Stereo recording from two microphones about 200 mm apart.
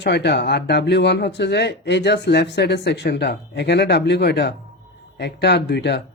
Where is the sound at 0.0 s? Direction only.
55° left (ahead or behind).